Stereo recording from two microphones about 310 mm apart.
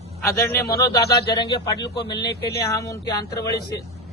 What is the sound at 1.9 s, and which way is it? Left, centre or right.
Speech, left.